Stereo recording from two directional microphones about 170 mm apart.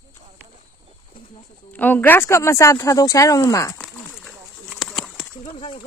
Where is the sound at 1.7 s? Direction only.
10° left (ahead or behind).